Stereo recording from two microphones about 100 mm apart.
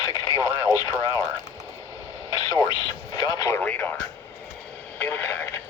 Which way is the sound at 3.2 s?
40° left (ahead or behind).